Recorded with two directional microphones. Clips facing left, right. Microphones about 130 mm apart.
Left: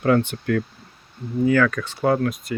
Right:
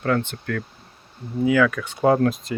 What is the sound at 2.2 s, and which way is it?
Speech, 30° right (ahead or behind).